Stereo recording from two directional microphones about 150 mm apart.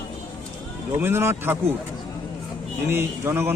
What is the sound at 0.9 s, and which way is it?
Speech, 15° right (ahead or behind).